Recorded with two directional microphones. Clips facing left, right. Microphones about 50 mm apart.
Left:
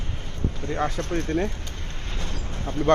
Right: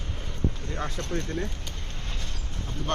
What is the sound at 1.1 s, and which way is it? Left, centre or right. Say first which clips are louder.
Speech: left 5 dB; left.